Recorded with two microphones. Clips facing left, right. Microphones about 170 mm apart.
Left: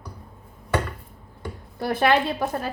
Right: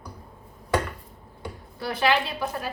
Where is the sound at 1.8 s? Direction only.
50° left (ahead or behind).